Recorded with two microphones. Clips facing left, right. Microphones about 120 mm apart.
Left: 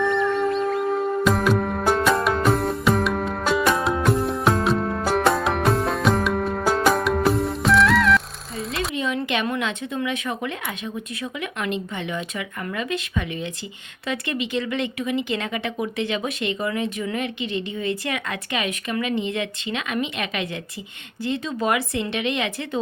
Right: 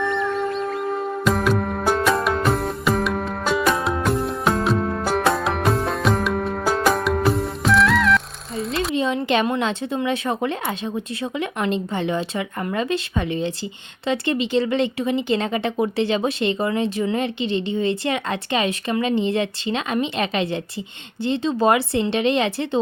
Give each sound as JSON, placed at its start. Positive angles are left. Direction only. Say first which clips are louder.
{"t": 0.0, "sound": "music", "louder": "left 2 dB", "side_deg": 0}
{"t": 9.0, "sound": "speech", "louder": "right 5 dB", "side_deg": -30}